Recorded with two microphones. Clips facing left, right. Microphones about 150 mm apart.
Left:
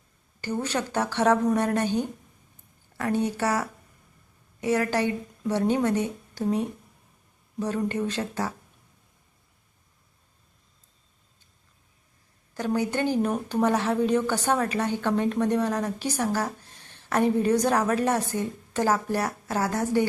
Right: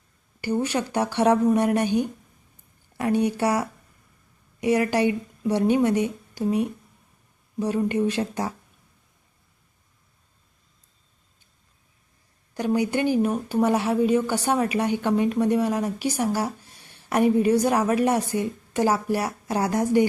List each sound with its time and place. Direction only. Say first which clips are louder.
0.4 s a woman's voice: right 4 dB; 10° right (ahead or behind)
12.5 s a woman's voice: right 3 dB; 15° right (ahead or behind)